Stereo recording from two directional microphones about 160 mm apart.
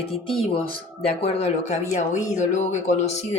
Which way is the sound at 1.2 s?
40° left (ahead or behind).